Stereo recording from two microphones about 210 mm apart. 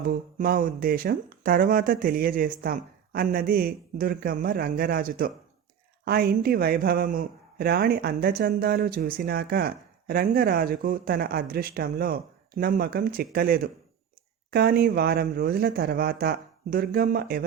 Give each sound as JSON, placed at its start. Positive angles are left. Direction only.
{"t": 0.0, "sound": "a man's voice", "side_deg": -45}